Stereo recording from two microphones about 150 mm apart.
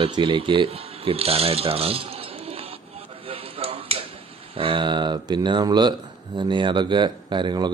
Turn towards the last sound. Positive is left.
turn(degrees=-30)  # may be behind; listen again after turning